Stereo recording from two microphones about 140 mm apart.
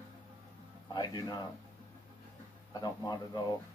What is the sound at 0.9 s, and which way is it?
Speech, 30° left (ahead or behind).